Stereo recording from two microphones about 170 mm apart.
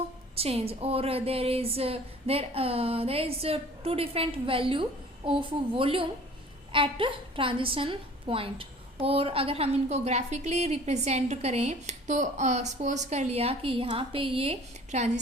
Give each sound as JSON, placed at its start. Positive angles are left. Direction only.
{"t": 0.3, "sound": "a woman's voice", "side_deg": -35}